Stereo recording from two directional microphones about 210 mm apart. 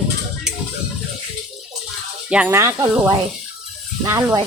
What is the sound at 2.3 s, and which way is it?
Speech, 10° right (ahead or behind).